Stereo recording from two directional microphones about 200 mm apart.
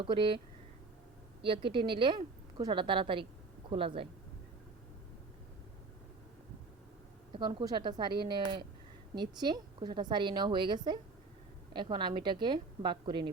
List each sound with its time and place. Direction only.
0.0 s a woman's voice: 25° right (ahead or behind)
1.4 s a woman's voice: 25° right (ahead or behind)
7.3 s a woman's voice: 20° right (ahead or behind)